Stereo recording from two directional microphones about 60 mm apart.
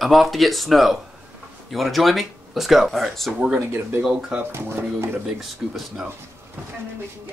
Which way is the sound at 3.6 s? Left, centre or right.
Right.